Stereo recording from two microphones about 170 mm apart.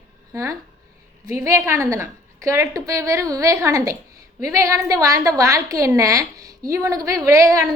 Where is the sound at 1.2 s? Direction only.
20° right (ahead or behind).